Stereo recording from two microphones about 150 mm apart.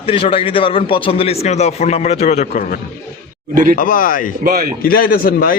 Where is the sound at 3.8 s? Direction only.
65° left (ahead or behind).